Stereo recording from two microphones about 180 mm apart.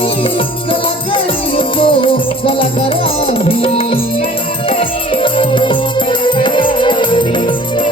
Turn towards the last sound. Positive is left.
turn(degrees=25)  # may be behind; listen again after turning